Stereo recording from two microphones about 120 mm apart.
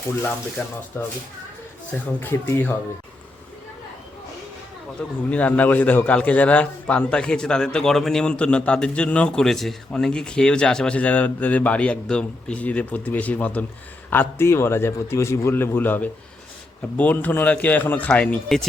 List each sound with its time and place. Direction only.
0.6 s a man's voice: 15° left (ahead or behind)
2.2 s a man's voice: 20° left (ahead or behind)
4.9 s a man's voice: 10° left (ahead or behind)